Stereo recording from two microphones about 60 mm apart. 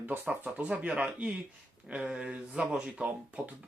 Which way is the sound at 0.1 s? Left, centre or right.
Right.